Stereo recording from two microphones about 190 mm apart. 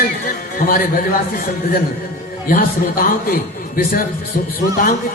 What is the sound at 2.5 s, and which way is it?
A man's voice, 50° left (ahead or behind).